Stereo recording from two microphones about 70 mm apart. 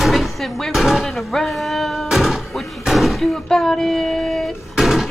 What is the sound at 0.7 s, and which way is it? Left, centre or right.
Speech, centre.